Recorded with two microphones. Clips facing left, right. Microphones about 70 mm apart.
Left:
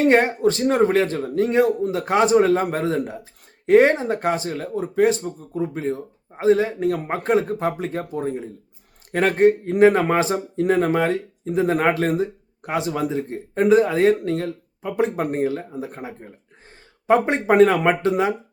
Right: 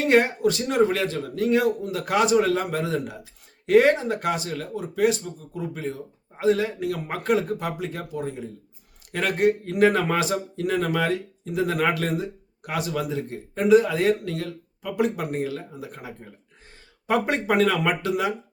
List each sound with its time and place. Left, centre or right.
0.0 s speech: left